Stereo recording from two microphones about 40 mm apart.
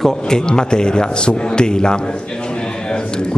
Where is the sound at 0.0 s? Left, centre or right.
Centre.